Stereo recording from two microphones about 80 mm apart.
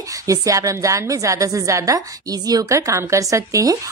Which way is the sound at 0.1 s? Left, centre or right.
Right.